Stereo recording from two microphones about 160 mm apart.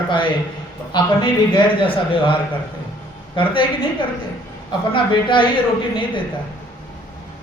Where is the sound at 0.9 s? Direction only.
30° left (ahead or behind).